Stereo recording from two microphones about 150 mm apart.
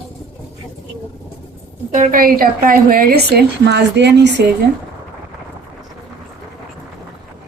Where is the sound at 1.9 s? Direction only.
60° right (ahead or behind); by 3.4 s 90° right.